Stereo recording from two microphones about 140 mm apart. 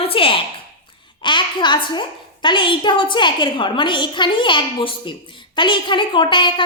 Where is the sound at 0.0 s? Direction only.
40° left (ahead or behind).